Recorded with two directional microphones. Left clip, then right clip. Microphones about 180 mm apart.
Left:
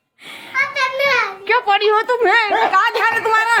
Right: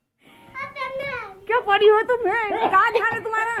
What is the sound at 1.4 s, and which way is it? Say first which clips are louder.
Speech: right 2 dB; 15° left (ahead or behind).